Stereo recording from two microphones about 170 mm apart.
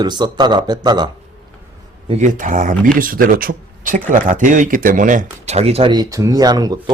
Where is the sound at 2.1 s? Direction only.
45° right (ahead or behind); by 6.9 s 25° right (ahead or behind).